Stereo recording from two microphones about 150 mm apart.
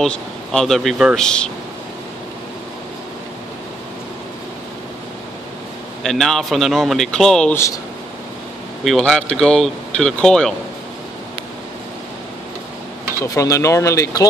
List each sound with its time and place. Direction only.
0.0 s speech: 5° left (ahead or behind)
6.0 s speech: centre (ahead or behind)
7.5 s speech: 20° left (ahead or behind)
8.8 s speech: centre (ahead or behind)
13.2 s speech: 20° left (ahead or behind)